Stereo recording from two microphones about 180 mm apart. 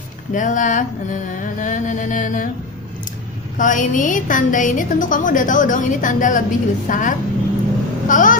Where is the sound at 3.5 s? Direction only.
45° left (ahead or behind).